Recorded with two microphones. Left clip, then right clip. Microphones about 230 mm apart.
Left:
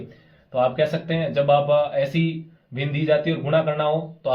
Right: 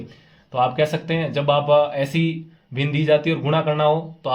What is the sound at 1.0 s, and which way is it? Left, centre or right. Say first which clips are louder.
Speech: even; right.